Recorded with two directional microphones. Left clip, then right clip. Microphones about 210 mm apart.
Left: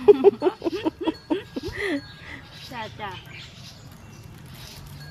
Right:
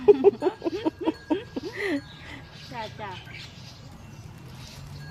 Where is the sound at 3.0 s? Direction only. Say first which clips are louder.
Left 3 dB; 45° left (ahead or behind).